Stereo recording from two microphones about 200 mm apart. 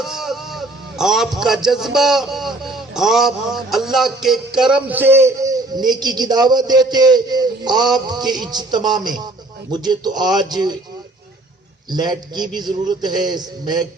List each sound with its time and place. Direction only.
0.0 s a man's voice: centre (ahead or behind); by 10.8 s 20° right (ahead or behind)
11.9 s a man's voice: 20° right (ahead or behind)